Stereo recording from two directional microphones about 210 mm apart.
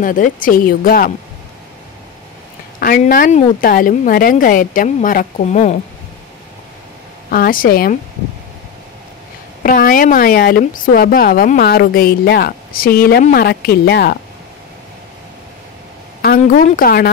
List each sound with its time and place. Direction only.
0.0 s a woman's voice: 40° left (ahead or behind)
2.8 s a woman's voice: 45° left (ahead or behind)
7.2 s a woman's voice: 45° left (ahead or behind)
9.6 s a woman's voice: 40° left (ahead or behind)
16.2 s a woman's voice: 45° left (ahead or behind)